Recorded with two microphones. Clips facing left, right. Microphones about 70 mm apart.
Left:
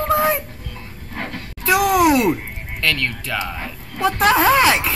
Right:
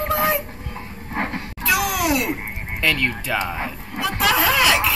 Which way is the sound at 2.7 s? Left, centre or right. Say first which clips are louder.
Right 1 dB; centre.